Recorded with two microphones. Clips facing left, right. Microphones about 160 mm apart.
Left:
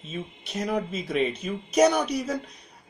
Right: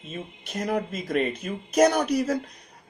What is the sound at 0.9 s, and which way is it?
Speech, 55° right (ahead or behind).